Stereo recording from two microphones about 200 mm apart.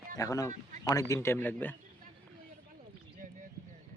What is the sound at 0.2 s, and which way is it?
Speech, 15° left (ahead or behind).